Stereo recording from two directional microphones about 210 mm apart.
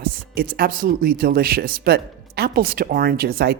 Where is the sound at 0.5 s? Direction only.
45° right (ahead or behind).